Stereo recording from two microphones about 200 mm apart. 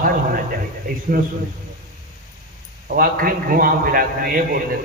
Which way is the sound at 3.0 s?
45° right (ahead or behind).